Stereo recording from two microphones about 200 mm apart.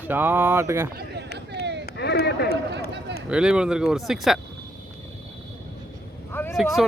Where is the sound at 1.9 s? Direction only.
55° left (ahead or behind).